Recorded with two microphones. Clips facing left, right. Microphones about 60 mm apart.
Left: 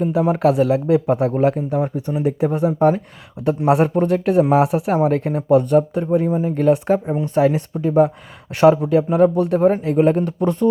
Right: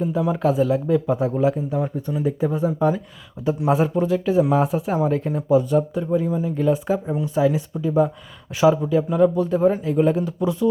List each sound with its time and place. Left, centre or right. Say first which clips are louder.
0.0 s speech: left 4 dB; left